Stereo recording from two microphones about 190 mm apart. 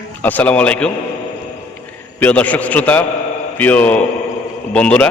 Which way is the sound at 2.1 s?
10° left (ahead or behind).